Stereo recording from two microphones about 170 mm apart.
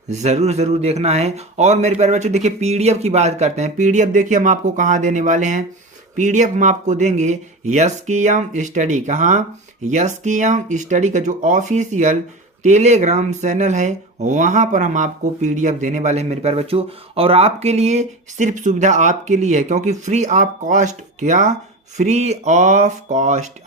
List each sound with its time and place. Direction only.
0.1 s speech: 40° right (ahead or behind)